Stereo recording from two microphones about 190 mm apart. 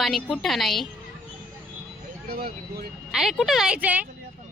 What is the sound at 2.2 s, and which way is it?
Speech, 55° right (ahead or behind).